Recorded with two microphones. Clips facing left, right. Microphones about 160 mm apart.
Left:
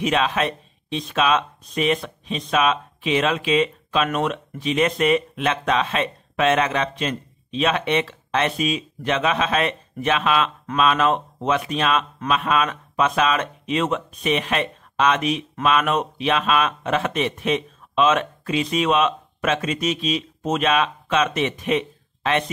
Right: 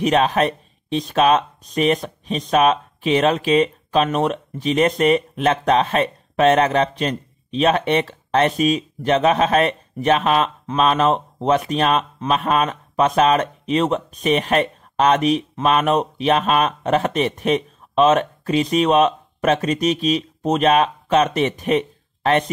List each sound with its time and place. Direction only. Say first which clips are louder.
0.0 s speech: right 4 dB; 40° right (ahead or behind)